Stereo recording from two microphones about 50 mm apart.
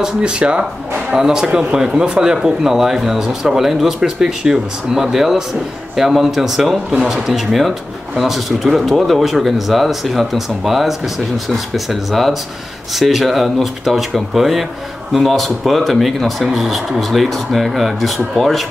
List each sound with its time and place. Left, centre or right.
0.0 s speech: centre